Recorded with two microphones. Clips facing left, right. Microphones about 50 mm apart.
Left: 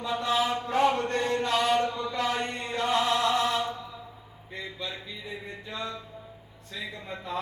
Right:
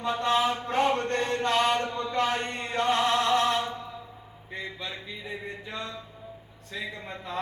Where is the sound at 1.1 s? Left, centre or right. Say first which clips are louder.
Right 1 dB; right.